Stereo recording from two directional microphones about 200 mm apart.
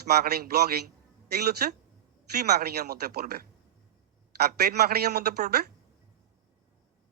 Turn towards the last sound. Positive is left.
turn(degrees=-50)  # may be behind; listen again after turning